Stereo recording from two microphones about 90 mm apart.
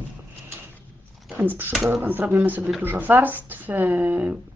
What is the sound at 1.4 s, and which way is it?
Speech, 20° right (ahead or behind).